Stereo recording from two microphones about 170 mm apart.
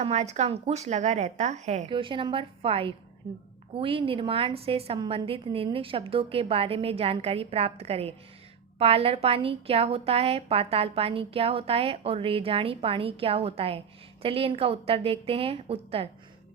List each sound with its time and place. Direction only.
0.0 s a woman's voice: 40° right (ahead or behind)
1.9 s a woman's voice: 30° right (ahead or behind)